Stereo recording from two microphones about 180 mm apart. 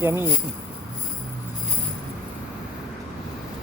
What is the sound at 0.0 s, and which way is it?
Speech, 15° right (ahead or behind).